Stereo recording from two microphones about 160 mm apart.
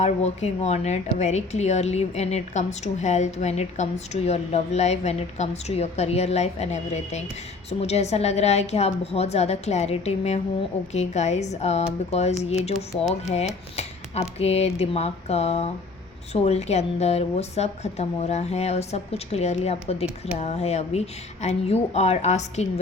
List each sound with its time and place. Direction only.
0.0 s a woman's voice: 40° left (ahead or behind)
13.7 s a woman's voice: 40° left (ahead or behind)